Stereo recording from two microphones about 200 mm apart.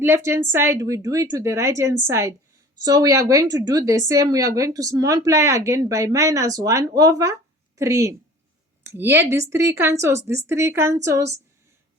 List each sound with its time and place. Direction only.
0.0 s speech: 10° right (ahead or behind)